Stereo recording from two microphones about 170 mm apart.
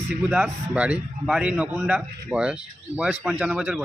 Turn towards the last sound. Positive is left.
turn(degrees=-5)  # may be behind; listen again after turning